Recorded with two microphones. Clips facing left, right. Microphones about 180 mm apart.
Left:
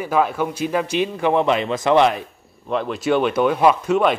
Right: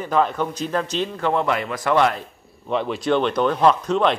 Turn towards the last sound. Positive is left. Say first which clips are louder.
# left 1 dB
turn(degrees=10)  # may be behind; listen again after turning